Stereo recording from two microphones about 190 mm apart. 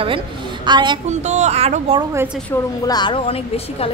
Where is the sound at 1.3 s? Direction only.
35° right (ahead or behind).